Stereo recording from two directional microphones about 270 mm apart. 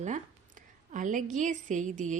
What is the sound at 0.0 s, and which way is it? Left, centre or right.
Speech, right.